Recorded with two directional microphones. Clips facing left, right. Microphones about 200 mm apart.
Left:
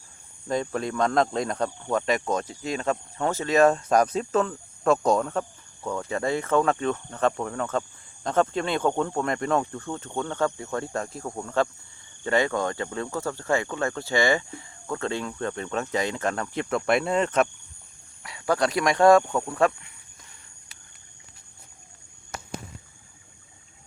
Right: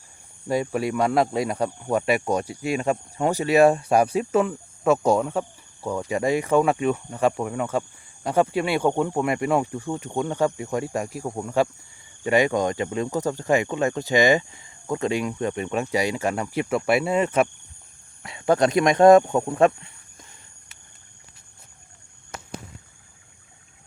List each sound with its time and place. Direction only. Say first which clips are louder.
0.4 s speech: right 3 dB; 10° right (ahead or behind)
18.2 s speech: right 5 dB; 25° right (ahead or behind)